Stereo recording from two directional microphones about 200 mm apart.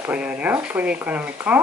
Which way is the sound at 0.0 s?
5° right (ahead or behind).